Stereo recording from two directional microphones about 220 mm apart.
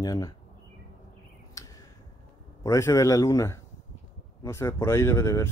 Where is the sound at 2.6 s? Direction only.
15° left (ahead or behind).